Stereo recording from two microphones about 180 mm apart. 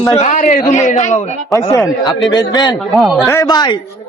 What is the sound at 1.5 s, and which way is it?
A woman's voice, 20° left (ahead or behind).